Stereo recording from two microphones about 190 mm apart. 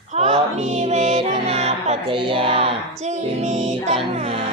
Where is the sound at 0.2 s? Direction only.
35° right (ahead or behind).